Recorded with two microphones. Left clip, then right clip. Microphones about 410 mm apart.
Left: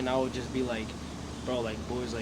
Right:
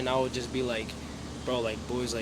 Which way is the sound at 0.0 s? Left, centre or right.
Right.